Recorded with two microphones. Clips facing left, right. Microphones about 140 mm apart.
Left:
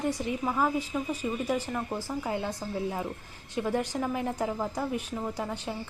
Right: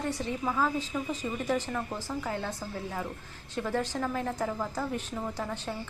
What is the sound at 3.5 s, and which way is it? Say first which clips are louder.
A woman's voice: left 2 dB; 15° left (ahead or behind).